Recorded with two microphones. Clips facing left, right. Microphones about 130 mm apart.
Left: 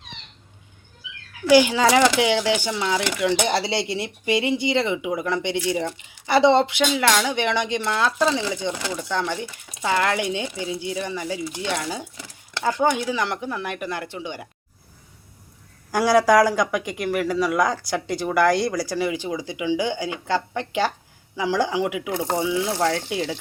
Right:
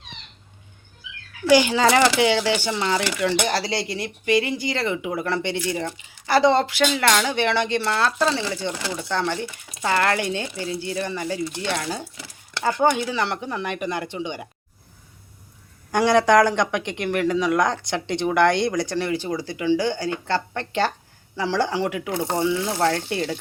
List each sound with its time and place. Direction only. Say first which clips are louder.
1.5 s speech: left 1 dB; 10° left (ahead or behind)
3.2 s speech: left 1 dB; 20° left (ahead or behind)
6.2 s speech: left 1 dB; 20° left (ahead or behind)
6.8 s speech: even; 5° left (ahead or behind)
15.9 s speech: even; 5° left (ahead or behind)